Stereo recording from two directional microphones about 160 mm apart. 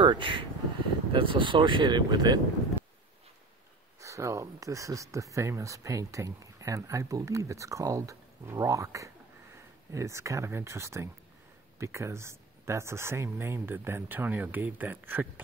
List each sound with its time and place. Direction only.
0.0 s speech: 30° right (ahead or behind)
4.0 s speech: 20° right (ahead or behind)